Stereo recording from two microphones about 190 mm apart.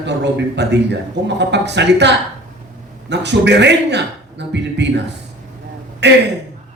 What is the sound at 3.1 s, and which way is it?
A man's voice, 65° right (ahead or behind).